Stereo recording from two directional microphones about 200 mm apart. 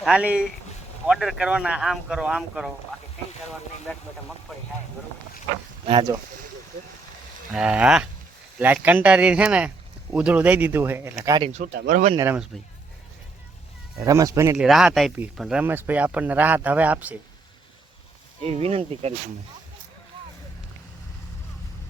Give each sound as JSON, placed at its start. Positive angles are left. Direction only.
{"t": 0.0, "sound": "speech", "side_deg": -5}
{"t": 3.9, "sound": "speech", "side_deg": 5}
{"t": 5.8, "sound": "speech", "side_deg": -25}
{"t": 7.5, "sound": "speech", "side_deg": -5}
{"t": 11.4, "sound": "speech", "side_deg": -35}
{"t": 11.7, "sound": "speech", "side_deg": -45}
{"t": 12.1, "sound": "speech", "side_deg": -10}
{"t": 14.0, "sound": "speech", "side_deg": -15}
{"t": 14.5, "sound": "speech", "side_deg": -5}
{"t": 18.4, "sound": "speech", "side_deg": -30}